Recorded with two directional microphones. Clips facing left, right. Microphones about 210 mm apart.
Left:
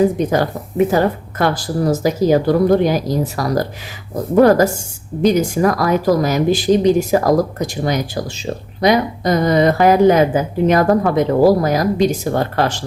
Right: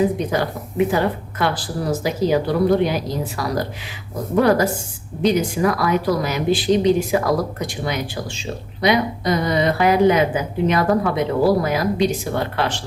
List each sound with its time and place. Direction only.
0.3 s speech: 45° left (ahead or behind)